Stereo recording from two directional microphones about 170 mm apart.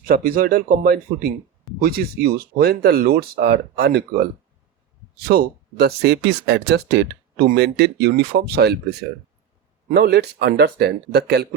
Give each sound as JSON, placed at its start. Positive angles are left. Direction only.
{"t": 0.0, "sound": "speech", "side_deg": -60}